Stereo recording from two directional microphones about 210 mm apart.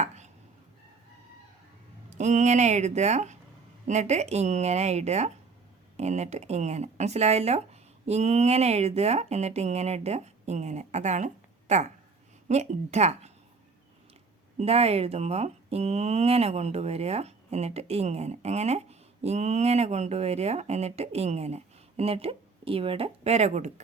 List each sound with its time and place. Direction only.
2.0 s speech: 35° right (ahead or behind)
14.6 s speech: 30° right (ahead or behind)